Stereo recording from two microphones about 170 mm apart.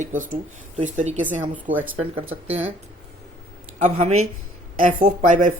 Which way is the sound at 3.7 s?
45° right (ahead or behind).